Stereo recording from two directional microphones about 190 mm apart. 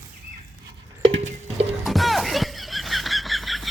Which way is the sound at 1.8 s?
Centre (ahead or behind).